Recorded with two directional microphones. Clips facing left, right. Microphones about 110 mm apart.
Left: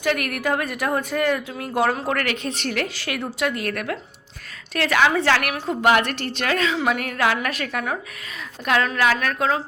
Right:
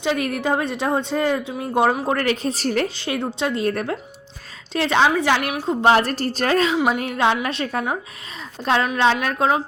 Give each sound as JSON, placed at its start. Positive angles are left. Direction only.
{"t": 0.0, "sound": "speech", "side_deg": -25}
{"t": 2.1, "sound": "a woman's voice", "side_deg": -35}
{"t": 6.7, "sound": "speech", "side_deg": -20}